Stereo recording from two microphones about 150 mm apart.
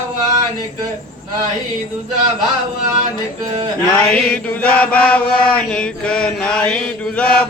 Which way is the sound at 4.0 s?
5° left (ahead or behind).